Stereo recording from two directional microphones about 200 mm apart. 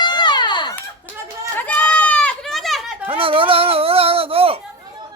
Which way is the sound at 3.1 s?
25° right (ahead or behind).